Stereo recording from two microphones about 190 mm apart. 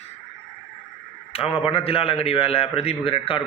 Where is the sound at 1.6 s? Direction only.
30° left (ahead or behind).